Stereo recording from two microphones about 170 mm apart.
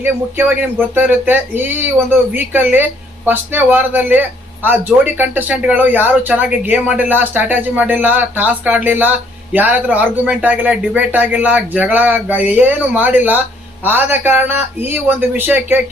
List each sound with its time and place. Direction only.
0.0 s speech: 10° right (ahead or behind)